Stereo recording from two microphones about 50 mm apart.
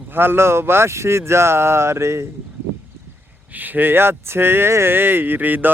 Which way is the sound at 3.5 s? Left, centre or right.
Right.